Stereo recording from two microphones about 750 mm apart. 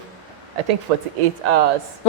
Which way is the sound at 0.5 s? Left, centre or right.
Right.